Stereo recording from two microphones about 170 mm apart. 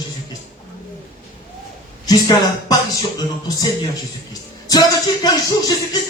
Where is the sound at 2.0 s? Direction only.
20° left (ahead or behind).